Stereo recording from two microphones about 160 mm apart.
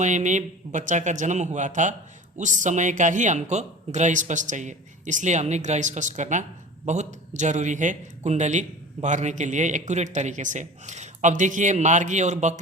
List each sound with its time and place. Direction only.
0.0 s a man's voice: 50° right (ahead or behind)